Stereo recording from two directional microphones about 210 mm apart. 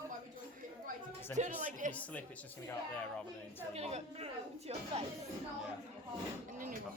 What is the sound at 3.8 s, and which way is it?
Speech, 30° right (ahead or behind).